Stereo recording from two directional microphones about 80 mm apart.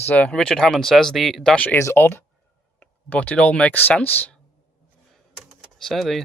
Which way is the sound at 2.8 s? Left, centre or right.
Centre.